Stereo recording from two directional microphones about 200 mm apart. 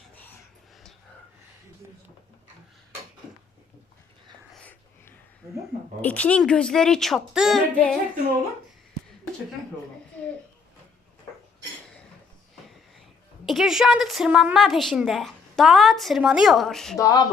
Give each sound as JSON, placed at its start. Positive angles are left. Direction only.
{"t": 4.5, "sound": "wheeze", "side_deg": 5}
{"t": 5.4, "sound": "a sound", "side_deg": -15}
{"t": 6.0, "sound": "a woman's voice", "side_deg": 5}
{"t": 13.4, "sound": "a woman's voice", "side_deg": 0}
{"t": 17.0, "sound": "speech", "side_deg": 15}